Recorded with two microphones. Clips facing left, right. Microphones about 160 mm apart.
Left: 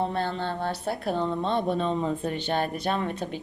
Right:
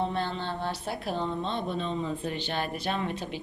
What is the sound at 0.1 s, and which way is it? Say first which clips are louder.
Speech: left 3 dB; 50° left (ahead or behind).